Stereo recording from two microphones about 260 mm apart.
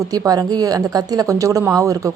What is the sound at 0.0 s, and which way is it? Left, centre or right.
A woman's voice, centre.